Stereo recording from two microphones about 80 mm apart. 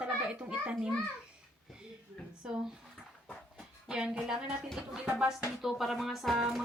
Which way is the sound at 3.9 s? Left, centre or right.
Centre.